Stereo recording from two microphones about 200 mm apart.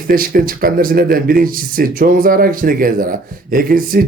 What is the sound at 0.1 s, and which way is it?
Speech, 45° right (ahead or behind).